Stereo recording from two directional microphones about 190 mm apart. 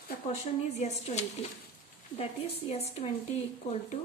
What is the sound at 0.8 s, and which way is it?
Speech, 35° left (ahead or behind).